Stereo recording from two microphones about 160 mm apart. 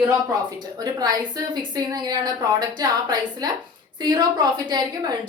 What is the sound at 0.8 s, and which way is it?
A woman's voice, 25° right (ahead or behind).